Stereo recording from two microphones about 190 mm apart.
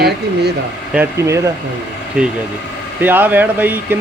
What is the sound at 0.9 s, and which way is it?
Speech, 15° right (ahead or behind).